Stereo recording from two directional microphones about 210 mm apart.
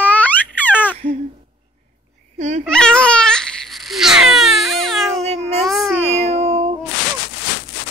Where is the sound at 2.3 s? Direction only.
35° right (ahead or behind).